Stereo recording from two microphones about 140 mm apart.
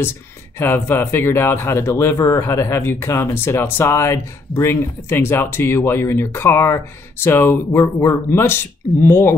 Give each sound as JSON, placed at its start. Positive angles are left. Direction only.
{"t": 0.6, "sound": "speech", "side_deg": 15}